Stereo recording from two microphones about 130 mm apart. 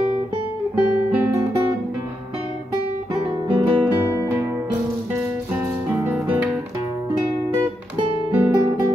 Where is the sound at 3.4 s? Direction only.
40° right (ahead or behind).